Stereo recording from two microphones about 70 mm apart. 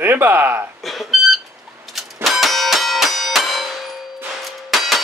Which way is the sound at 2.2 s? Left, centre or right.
Centre.